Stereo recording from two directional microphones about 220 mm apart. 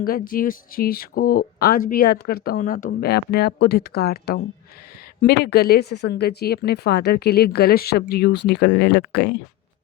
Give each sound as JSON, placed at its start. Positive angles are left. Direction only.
{"t": 0.0, "sound": "speech", "side_deg": 40}